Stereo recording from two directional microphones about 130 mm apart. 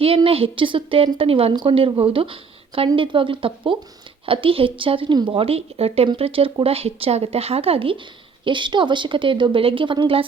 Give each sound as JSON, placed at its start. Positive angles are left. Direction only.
{"t": 0.0, "sound": "a woman's voice", "side_deg": -45}